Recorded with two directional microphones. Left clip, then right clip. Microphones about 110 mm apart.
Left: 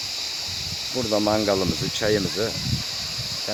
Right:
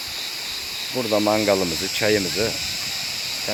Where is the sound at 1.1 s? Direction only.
20° left (ahead or behind).